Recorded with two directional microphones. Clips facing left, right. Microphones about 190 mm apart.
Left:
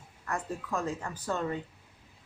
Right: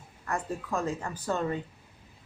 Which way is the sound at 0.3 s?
30° right (ahead or behind).